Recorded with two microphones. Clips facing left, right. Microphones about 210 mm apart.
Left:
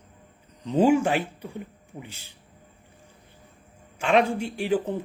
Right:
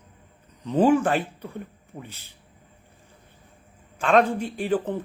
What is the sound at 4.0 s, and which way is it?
Speech, 10° left (ahead or behind).